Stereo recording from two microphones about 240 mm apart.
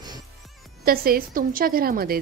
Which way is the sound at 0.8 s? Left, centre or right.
Right.